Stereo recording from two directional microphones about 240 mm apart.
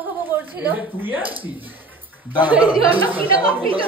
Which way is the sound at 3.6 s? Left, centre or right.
Right.